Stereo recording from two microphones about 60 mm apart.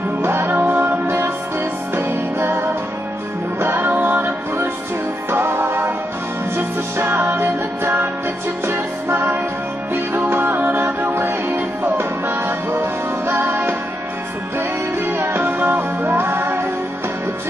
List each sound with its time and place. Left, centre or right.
0.2 s music: right
3.6 s music: right
11.1 s music: right
15.0 s music: right